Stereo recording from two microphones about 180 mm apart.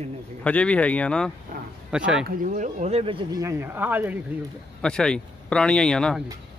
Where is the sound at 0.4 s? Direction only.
5° left (ahead or behind).